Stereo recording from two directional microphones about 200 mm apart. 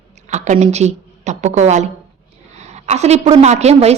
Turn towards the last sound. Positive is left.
turn(degrees=-35)  # may be behind; listen again after turning